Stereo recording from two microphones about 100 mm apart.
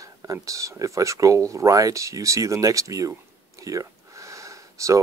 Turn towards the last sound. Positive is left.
turn(degrees=-30)  # may be behind; listen again after turning